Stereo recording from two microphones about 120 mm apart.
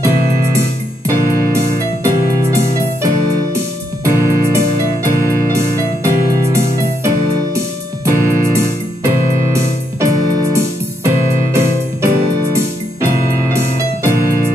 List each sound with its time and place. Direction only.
0.0 s music: 25° right (ahead or behind)
14.0 s keyboard: 20° right (ahead or behind)